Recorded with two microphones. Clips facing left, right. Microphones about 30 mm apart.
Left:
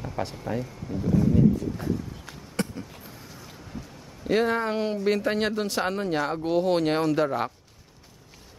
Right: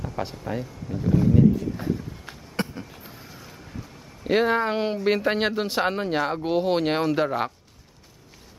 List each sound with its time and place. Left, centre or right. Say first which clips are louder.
0.2 s speech: even; centre
3.0 s vehicle: right 1 dB; centre
4.2 s speech: right 2 dB; centre